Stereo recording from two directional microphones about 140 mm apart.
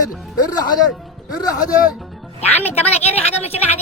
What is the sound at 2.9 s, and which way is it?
Speech, 50° left (ahead or behind).